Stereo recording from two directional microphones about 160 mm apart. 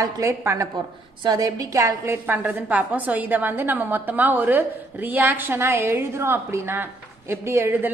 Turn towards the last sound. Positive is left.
turn(degrees=-15)  # may be behind; listen again after turning